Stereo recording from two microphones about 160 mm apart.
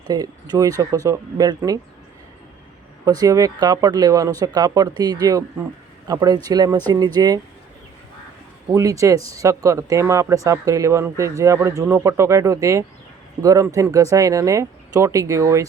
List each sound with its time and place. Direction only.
0.1 s speech: 25° right (ahead or behind)
3.0 s speech: 25° right (ahead or behind)
8.7 s speech: 20° right (ahead or behind)